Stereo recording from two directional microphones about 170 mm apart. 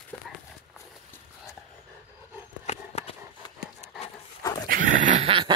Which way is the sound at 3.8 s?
35° left (ahead or behind).